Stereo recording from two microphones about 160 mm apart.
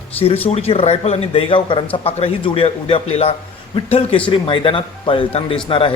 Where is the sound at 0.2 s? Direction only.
40° left (ahead or behind).